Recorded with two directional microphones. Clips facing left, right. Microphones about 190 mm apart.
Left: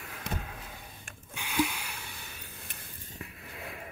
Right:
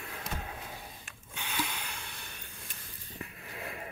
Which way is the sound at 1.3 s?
10° left (ahead or behind).